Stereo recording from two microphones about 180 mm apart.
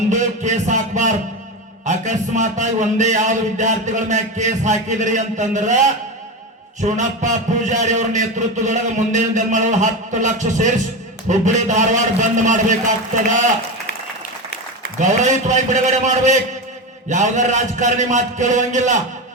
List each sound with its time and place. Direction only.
0.1 s a man's voice: 40° right (ahead or behind)
6.8 s a man's voice: 45° right (ahead or behind)
15.0 s a man's voice: 40° right (ahead or behind)